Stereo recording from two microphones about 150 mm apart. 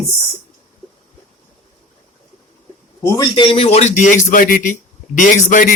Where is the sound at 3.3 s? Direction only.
35° left (ahead or behind).